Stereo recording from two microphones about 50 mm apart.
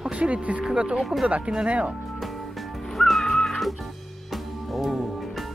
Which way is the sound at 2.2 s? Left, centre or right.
Centre.